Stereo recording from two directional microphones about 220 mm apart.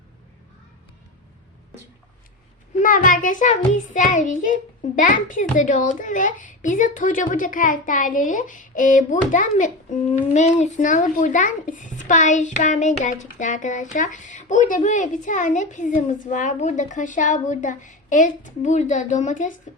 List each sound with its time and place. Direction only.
2.7 s a child's voice: 35° left (ahead or behind)